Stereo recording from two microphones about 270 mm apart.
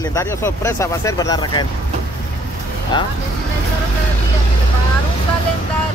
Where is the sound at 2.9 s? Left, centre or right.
Centre.